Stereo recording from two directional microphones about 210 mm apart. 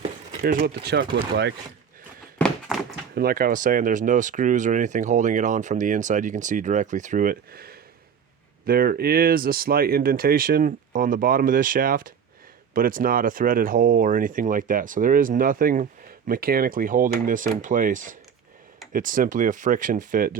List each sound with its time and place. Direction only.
0.0 s speech: 40° right (ahead or behind)
2.4 s a sound: centre (ahead or behind)
3.2 s speech: 45° right (ahead or behind)